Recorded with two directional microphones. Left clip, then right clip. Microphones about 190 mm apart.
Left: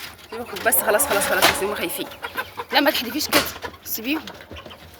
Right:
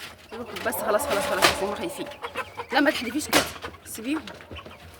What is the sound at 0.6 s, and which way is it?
Speech, 10° right (ahead or behind).